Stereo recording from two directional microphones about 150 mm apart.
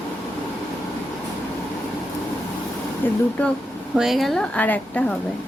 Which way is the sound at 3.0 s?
15° left (ahead or behind).